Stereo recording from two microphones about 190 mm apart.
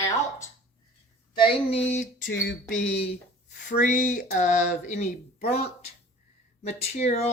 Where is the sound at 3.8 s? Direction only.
45° left (ahead or behind).